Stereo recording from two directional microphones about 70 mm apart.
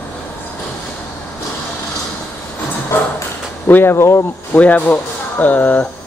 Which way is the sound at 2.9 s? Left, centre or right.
Left.